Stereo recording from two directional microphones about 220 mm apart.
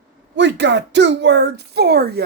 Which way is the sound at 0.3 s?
55° right (ahead or behind).